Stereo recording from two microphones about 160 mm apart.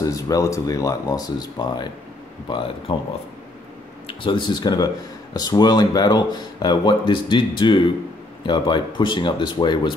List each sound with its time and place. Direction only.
0.0 s speech: 20° left (ahead or behind)
4.2 s speech: 30° left (ahead or behind)